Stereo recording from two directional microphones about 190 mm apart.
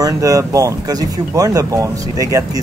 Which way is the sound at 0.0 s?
15° right (ahead or behind).